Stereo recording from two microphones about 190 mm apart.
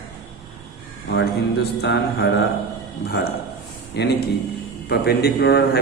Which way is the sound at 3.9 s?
65° left (ahead or behind).